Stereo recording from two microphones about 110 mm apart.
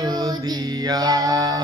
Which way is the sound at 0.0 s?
30° right (ahead or behind).